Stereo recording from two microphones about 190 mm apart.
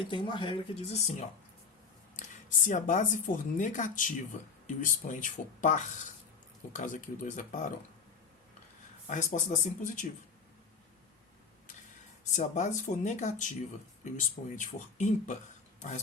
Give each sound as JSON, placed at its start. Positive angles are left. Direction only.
{"t": 0.0, "sound": "speech", "side_deg": 25}
{"t": 2.6, "sound": "speech", "side_deg": 40}
{"t": 9.0, "sound": "speech", "side_deg": 40}
{"t": 12.4, "sound": "speech", "side_deg": 40}